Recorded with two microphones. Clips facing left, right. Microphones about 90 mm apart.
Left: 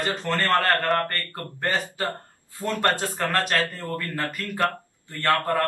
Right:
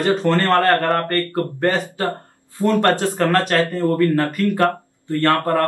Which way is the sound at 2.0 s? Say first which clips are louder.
Right 6 dB; 20° right (ahead or behind).